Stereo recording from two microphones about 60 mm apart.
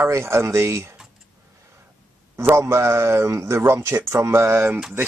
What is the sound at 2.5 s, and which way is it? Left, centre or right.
Speech, right.